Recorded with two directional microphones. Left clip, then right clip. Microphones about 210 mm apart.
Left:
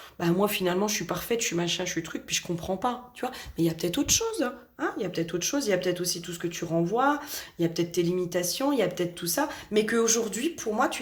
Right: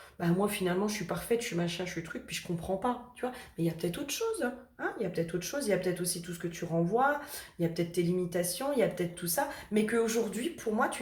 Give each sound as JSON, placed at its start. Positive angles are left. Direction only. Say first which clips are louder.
{"t": 0.2, "sound": "speech", "louder": "left 5 dB", "side_deg": 45}